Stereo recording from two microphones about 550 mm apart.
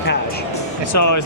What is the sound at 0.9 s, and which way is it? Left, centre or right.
Speech, left.